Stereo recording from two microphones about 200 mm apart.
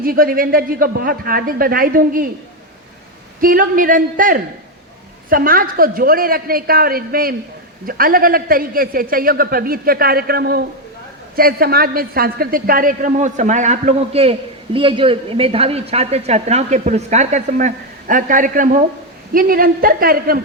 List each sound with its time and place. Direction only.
0.0 s a man's voice: 45° right (ahead or behind)
3.4 s a man's voice: 45° right (ahead or behind)